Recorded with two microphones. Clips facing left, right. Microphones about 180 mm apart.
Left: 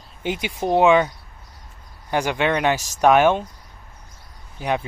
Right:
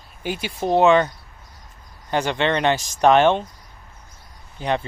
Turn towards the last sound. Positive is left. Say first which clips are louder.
# even
turn(degrees=10)  # may be behind; listen again after turning